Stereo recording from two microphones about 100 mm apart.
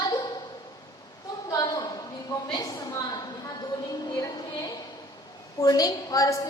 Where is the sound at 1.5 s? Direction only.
40° left (ahead or behind).